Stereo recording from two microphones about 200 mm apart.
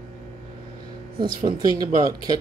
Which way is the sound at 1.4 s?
20° right (ahead or behind).